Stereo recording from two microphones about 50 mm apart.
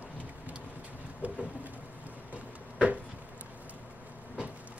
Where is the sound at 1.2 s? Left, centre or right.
Right.